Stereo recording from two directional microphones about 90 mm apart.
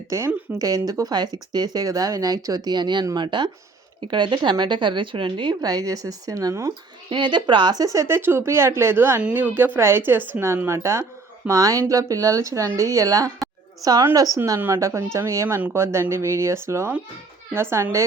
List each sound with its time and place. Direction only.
0.1 s a woman's voice: 35° right (ahead or behind)
7.1 s a woman's voice: 60° right (ahead or behind); by 17.8 s 30° right (ahead or behind)